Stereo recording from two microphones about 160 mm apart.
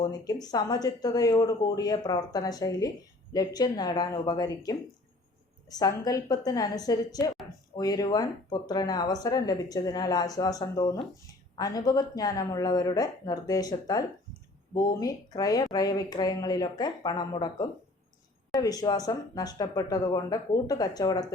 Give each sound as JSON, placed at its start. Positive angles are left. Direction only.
{"t": 0.0, "sound": "speech", "side_deg": 25}